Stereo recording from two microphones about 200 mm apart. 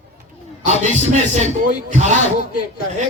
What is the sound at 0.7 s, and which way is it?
Speech, 35° right (ahead or behind).